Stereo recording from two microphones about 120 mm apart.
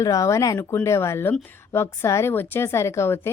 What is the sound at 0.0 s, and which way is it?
A woman's voice, 25° left (ahead or behind).